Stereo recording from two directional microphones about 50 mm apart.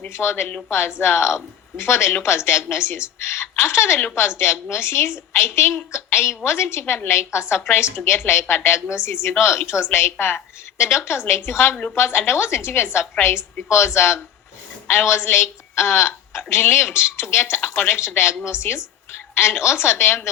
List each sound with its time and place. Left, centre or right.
0.1 s a woman's voice: left
11.7 s speech: left
11.9 s a woman's voice: left